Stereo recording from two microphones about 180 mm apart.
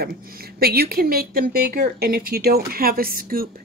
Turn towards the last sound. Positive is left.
turn(degrees=-55)  # may be behind; listen again after turning